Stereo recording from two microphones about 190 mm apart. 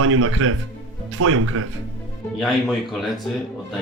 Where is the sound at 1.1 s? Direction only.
90° right.